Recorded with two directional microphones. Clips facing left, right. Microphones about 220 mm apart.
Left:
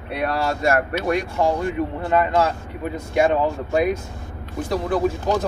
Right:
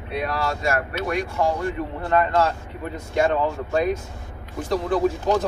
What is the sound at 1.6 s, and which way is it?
Speech, 10° left (ahead or behind).